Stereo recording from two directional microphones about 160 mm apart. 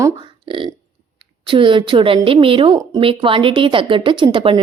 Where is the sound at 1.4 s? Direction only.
30° right (ahead or behind).